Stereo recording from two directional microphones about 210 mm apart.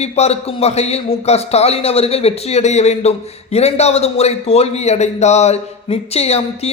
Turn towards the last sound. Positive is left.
turn(degrees=30)  # may be behind; listen again after turning